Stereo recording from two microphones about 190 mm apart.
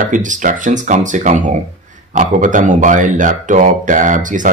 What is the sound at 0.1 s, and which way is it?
Speech, 45° right (ahead or behind).